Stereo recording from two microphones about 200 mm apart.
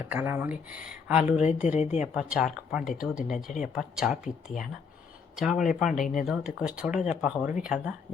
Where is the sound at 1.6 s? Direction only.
35° left (ahead or behind).